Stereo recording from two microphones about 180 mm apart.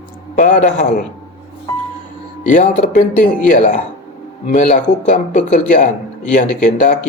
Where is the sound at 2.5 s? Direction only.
45° left (ahead or behind).